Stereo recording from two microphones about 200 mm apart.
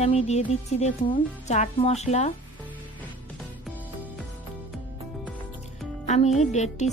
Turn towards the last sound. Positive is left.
turn(degrees=35)  # may be behind; listen again after turning